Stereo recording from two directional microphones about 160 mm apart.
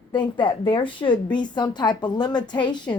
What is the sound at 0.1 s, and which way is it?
A woman's voice, 30° left (ahead or behind).